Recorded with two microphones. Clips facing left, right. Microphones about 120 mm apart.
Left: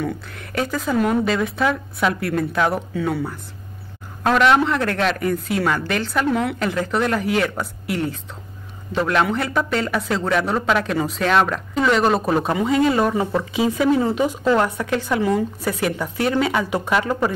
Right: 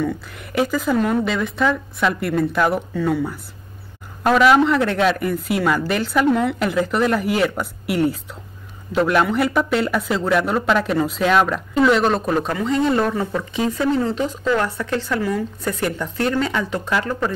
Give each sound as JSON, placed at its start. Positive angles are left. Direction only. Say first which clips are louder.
{"t": 0.7, "sound": "a man's voice", "louder": "left 2 dB", "side_deg": 0}